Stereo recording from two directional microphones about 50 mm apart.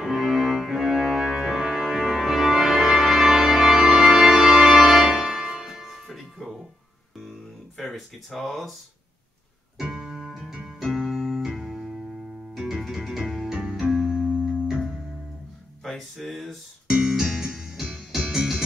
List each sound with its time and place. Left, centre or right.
0.0 s music: centre
7.9 s a sound: centre
9.8 s music: centre
15.8 s music: centre